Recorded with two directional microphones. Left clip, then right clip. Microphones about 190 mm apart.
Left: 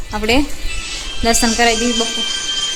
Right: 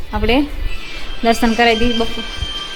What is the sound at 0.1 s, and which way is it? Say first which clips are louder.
A woman's voice: even; 5° left (ahead or behind).